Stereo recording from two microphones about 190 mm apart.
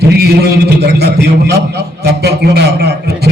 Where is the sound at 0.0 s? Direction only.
60° right (ahead or behind).